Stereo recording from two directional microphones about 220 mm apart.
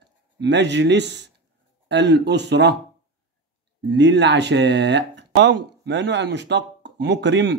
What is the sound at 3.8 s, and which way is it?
Speech, 50° right (ahead or behind).